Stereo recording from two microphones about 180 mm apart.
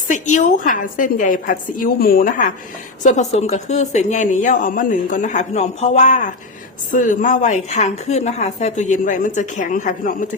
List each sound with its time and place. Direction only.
0.1 s a woman's voice: 45° left (ahead or behind)
3.0 s a woman's voice: 40° left (ahead or behind)